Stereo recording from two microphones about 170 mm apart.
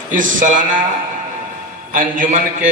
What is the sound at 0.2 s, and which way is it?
Speech, 50° right (ahead or behind).